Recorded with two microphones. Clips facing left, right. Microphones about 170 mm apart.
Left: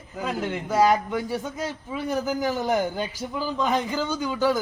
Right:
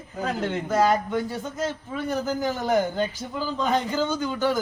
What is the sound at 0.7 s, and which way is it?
A man's voice, 10° left (ahead or behind).